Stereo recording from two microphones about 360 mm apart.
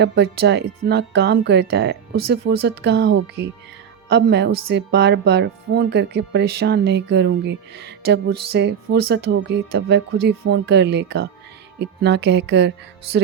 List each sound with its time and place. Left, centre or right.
0.0 s speech: right